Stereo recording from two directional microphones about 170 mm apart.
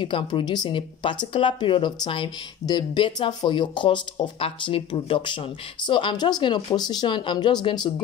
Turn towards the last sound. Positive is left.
turn(degrees=25)  # may be behind; listen again after turning